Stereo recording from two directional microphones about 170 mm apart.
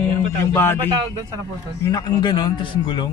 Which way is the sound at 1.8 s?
25° left (ahead or behind).